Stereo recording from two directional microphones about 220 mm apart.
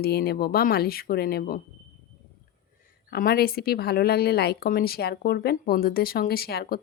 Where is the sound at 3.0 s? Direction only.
40° left (ahead or behind).